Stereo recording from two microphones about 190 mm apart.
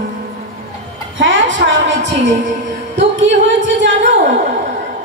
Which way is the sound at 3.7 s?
75° right (ahead or behind).